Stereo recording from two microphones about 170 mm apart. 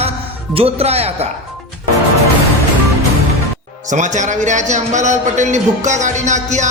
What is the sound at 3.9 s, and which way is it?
A man's voice, 45° right (ahead or behind).